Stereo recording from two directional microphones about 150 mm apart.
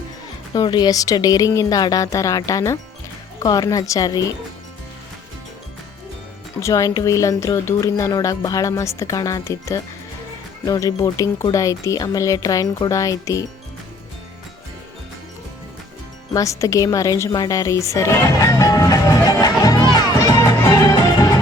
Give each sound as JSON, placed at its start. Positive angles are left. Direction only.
{"t": 0.5, "sound": "speech", "side_deg": 30}
{"t": 6.6, "sound": "speech", "side_deg": 20}
{"t": 16.3, "sound": "speech", "side_deg": 20}
{"t": 19.9, "sound": "music", "side_deg": 25}